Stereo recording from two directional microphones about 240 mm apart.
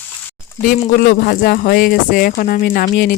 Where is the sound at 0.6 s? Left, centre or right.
Left.